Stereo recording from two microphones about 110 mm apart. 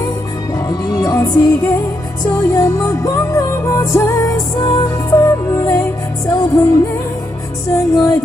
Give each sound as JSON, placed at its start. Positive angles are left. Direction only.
{"t": 0.7, "sound": "music", "side_deg": 30}
{"t": 5.5, "sound": "music", "side_deg": 25}
{"t": 7.7, "sound": "music", "side_deg": 30}